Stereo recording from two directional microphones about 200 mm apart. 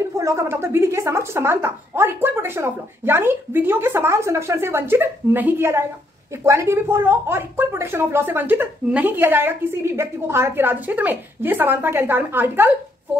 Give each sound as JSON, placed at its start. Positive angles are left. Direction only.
{"t": 0.2, "sound": "speech", "side_deg": -15}